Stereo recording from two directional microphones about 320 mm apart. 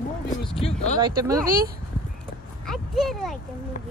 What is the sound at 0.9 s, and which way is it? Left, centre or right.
Speech, centre.